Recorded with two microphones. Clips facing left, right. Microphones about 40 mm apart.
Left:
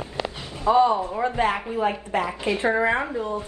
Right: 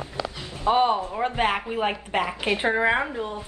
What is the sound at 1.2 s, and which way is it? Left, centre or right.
A woman's voice, right.